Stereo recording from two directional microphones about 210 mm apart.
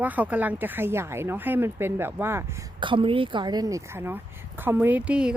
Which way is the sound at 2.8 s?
25° right (ahead or behind).